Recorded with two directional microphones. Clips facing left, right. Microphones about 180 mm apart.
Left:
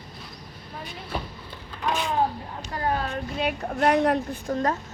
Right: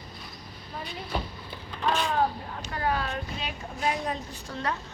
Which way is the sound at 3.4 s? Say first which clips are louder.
Left 9 dB; 65° left (ahead or behind).